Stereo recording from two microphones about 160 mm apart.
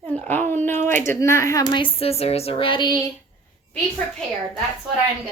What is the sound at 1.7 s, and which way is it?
Speech, 30° left (ahead or behind).